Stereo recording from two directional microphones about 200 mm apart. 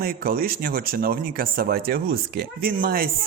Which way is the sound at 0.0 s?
50° right (ahead or behind).